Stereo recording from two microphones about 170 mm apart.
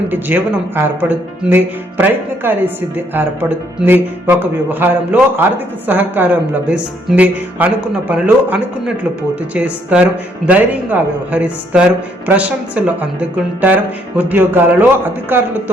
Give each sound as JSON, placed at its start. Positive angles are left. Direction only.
{"t": 0.1, "sound": "speech", "side_deg": -10}